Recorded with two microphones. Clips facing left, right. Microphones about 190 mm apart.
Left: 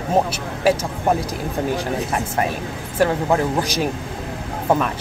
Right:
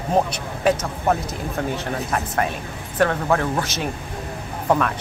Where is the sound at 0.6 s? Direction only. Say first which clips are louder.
Left 1 dB; 10° left (ahead or behind).